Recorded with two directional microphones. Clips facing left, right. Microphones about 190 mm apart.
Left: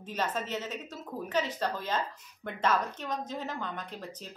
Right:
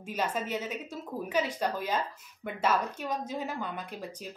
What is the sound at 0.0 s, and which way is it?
A woman's voice, 10° right (ahead or behind).